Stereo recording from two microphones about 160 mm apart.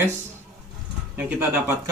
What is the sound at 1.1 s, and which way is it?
Speech, 10° right (ahead or behind).